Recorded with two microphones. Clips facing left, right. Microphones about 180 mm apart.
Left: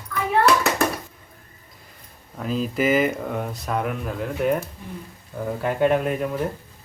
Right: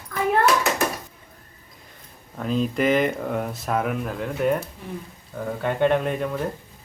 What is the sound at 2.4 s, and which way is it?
Speech, centre (ahead or behind).